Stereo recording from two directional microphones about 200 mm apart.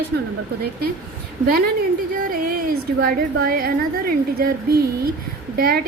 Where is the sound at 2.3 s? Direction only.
45° right (ahead or behind).